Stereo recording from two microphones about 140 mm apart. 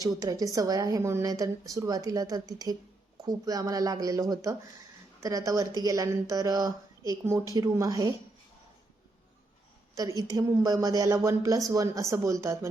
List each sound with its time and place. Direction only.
0.0 s a woman's voice: 25° right (ahead or behind)
9.9 s a woman's voice: 20° right (ahead or behind)